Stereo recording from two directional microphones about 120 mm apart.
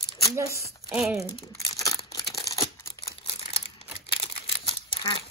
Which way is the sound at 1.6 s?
30° left (ahead or behind).